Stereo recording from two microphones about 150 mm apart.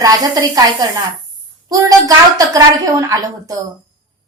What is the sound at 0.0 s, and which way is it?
A woman's voice, 25° right (ahead or behind).